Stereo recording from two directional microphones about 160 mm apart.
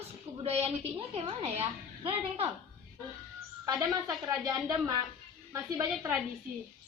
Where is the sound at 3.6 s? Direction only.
25° right (ahead or behind).